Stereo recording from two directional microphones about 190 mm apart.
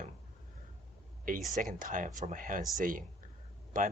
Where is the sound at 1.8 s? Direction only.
45° right (ahead or behind).